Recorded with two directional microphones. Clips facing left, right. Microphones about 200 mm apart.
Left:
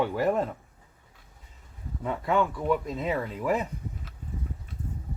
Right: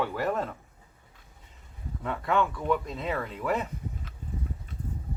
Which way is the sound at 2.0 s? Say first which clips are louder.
Left 1 dB; 10° left (ahead or behind).